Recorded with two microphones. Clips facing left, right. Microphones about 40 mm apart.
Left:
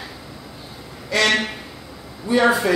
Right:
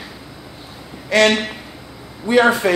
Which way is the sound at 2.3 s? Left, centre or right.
Right.